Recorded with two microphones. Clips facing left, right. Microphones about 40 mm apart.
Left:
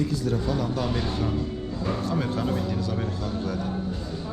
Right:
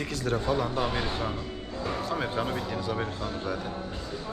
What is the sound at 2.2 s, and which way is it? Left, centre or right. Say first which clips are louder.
Speech: left 3 dB; right.